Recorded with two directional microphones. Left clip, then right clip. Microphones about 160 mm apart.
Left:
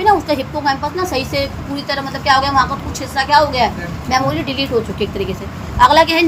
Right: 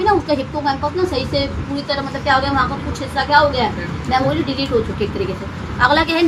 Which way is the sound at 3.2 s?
45° left (ahead or behind).